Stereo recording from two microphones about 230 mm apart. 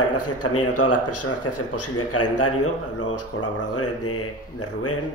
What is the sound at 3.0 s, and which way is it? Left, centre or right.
Speech, left.